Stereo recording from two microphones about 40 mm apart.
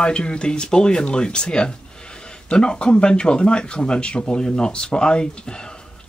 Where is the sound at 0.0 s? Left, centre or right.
Left.